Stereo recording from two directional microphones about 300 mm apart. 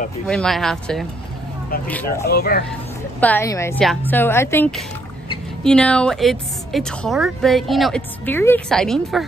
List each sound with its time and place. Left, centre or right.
0.3 s a woman's voice: centre
2.2 s speech: left
3.2 s a woman's voice: centre